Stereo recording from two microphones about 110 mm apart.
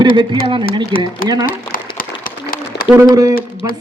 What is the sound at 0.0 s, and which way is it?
A man's voice, 45° right (ahead or behind).